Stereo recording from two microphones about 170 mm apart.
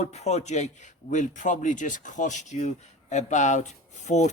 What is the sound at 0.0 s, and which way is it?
A man's voice, 40° left (ahead or behind).